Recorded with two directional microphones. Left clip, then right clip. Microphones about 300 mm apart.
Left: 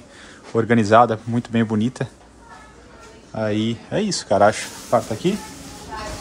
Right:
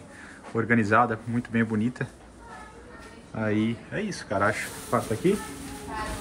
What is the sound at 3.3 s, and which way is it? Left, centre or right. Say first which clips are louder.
Speech: left 5 dB; centre.